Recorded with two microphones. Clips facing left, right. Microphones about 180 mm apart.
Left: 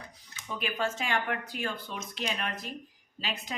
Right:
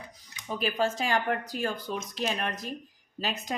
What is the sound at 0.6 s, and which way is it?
Speech, 35° right (ahead or behind).